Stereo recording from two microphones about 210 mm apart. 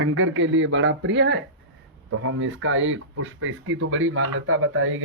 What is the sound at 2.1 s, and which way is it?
Speech, 70° right (ahead or behind).